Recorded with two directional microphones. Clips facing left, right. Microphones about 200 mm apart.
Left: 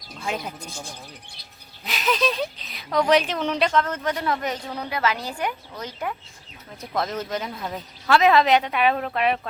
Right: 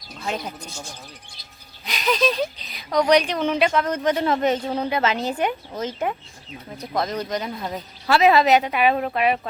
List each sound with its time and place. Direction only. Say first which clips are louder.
0.2 s speech: right 1 dB; 5° left (ahead or behind)
1.8 s speech: right 2 dB; centre (ahead or behind); by 6.1 s 25° right (ahead or behind)
6.9 s speech: right 2 dB; 5° left (ahead or behind)
7.6 s speech: right 2 dB; 10° right (ahead or behind)